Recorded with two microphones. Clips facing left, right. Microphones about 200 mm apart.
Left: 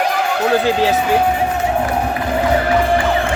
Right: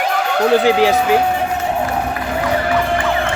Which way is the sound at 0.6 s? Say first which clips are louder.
Right 2 dB; 15° right (ahead or behind).